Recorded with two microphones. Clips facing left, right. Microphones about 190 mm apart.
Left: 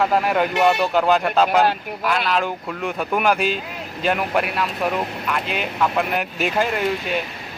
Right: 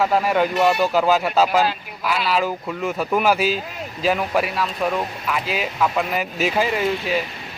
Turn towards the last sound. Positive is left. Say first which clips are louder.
# right 1 dB
turn(degrees=0)  # may be behind; listen again after turning